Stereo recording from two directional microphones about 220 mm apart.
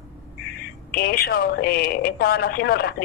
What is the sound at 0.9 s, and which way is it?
Speech, 45° left (ahead or behind).